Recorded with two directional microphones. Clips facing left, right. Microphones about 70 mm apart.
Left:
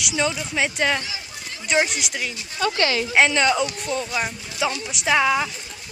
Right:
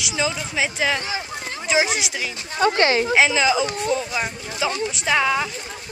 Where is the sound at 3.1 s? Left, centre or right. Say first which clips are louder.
Left 3 dB; centre.